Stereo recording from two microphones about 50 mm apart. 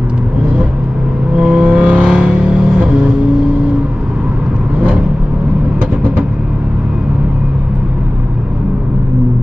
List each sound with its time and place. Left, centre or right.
1.3 s vehicle: right